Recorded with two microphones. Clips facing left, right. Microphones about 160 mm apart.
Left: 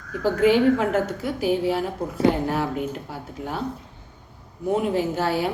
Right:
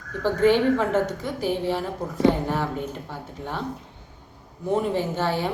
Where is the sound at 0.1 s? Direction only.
10° left (ahead or behind).